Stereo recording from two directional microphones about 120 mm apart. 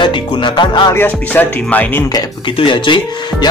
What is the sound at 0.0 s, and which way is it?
Speech, 40° left (ahead or behind).